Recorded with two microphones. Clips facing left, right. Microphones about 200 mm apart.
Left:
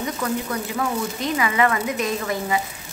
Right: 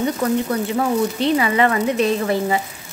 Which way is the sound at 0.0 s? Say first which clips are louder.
Right 6 dB; 35° right (ahead or behind).